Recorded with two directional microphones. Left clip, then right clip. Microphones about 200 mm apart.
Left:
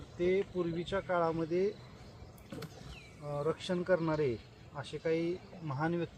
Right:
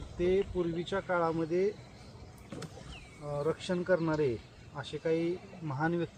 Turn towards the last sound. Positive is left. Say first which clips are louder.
# right 2 dB
turn(degrees=-15)  # may be behind; listen again after turning